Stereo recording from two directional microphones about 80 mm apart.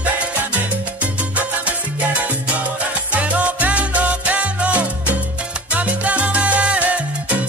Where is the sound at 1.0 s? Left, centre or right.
Centre.